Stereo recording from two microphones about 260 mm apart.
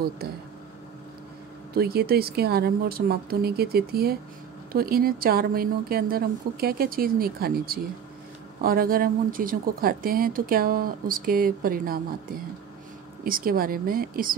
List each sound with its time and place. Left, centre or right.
1.7 s speech: right